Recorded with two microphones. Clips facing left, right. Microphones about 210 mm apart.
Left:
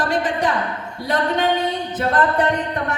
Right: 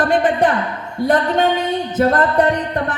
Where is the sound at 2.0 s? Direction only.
45° right (ahead or behind).